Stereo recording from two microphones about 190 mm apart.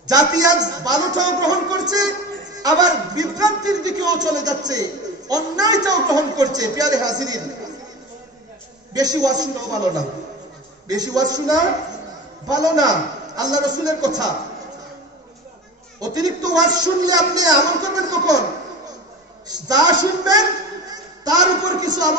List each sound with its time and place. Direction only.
0.0 s a man's voice: 20° right (ahead or behind)
8.9 s a man's voice: 20° right (ahead or behind)
16.0 s a man's voice: 20° right (ahead or behind)
19.4 s a man's voice: 20° right (ahead or behind)